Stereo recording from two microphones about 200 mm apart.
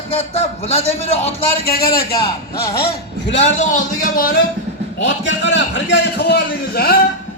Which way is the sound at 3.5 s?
40° left (ahead or behind).